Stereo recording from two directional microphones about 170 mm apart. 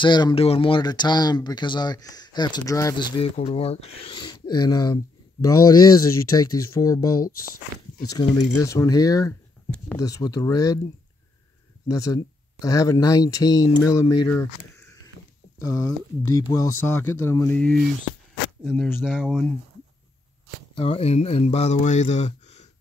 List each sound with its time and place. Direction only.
0.0 s speech: 25° left (ahead or behind)
11.9 s speech: 20° left (ahead or behind)
15.6 s speech: 20° left (ahead or behind)
18.6 s speech: 5° left (ahead or behind)
19.0 s speech: 5° right (ahead or behind)
20.7 s speech: 35° left (ahead or behind)